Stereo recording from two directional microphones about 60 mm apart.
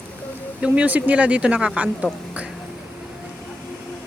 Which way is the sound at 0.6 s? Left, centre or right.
Right.